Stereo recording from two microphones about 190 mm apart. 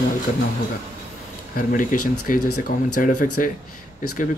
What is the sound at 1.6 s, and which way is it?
Speech, 45° left (ahead or behind).